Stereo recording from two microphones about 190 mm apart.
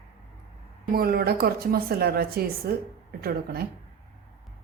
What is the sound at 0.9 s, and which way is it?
A woman's voice, 50° right (ahead or behind).